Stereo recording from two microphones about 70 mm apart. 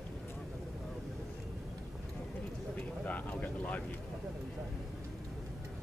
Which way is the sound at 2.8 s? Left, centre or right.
Left.